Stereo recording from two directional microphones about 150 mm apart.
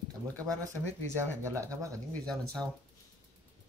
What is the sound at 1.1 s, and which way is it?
Speech, 20° right (ahead or behind).